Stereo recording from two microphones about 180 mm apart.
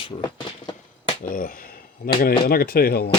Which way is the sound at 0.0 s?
25° left (ahead or behind).